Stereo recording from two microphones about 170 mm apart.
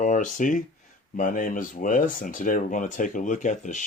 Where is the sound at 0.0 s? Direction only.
50° left (ahead or behind).